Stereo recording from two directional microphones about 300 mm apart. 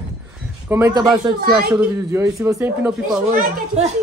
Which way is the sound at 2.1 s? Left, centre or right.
Centre.